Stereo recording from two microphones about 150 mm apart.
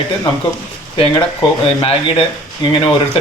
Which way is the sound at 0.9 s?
40° left (ahead or behind).